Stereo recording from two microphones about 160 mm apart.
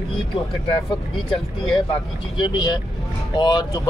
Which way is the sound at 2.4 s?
30° left (ahead or behind).